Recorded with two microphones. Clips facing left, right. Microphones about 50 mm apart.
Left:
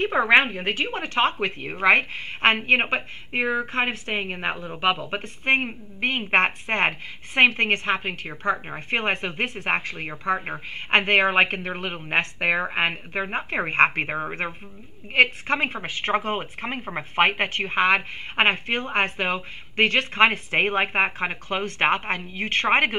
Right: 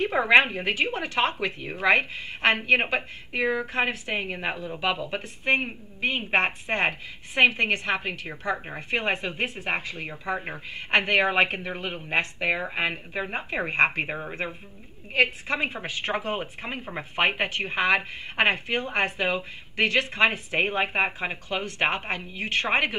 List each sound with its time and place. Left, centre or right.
0.3 s a woman's voice: left